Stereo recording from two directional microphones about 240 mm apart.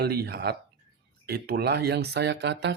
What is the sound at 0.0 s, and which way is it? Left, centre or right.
Speech, right.